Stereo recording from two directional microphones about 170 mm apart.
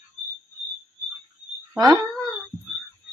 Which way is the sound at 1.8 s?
20° right (ahead or behind).